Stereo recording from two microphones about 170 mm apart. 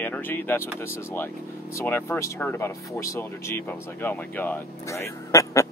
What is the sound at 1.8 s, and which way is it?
Speech, 15° left (ahead or behind).